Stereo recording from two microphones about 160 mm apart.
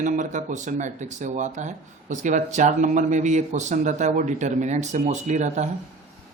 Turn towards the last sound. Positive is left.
turn(degrees=-45)  # may be behind; listen again after turning